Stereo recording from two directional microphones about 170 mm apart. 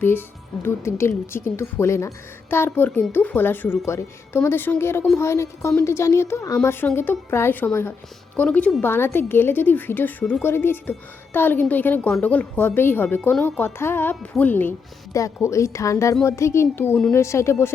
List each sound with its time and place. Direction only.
0.0 s speech: 10° left (ahead or behind)